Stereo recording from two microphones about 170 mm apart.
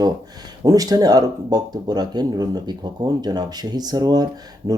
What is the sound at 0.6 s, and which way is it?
Speech, 20° right (ahead or behind).